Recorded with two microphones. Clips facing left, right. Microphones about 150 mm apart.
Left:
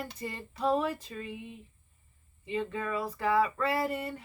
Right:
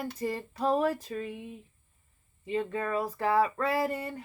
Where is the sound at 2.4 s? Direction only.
40° right (ahead or behind).